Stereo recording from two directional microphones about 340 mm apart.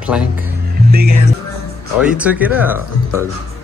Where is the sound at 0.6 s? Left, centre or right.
Right.